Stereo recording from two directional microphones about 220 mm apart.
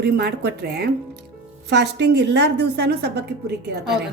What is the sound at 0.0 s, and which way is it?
A woman's voice, 50° right (ahead or behind).